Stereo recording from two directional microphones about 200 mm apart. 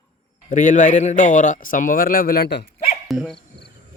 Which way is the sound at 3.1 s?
Centre (ahead or behind).